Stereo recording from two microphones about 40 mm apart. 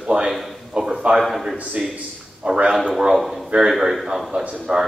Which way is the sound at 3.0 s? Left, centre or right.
Centre.